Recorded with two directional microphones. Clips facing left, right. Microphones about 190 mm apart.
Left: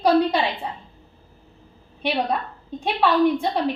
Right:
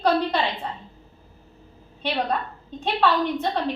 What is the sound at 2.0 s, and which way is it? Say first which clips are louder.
A woman's voice: left 2 dB; 10° left (ahead or behind).